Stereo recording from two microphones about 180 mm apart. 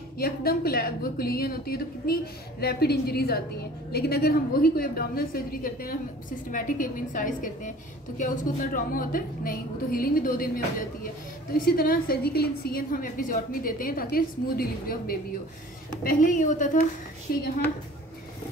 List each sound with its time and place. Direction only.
0.2 s a woman's voice: 55° left (ahead or behind)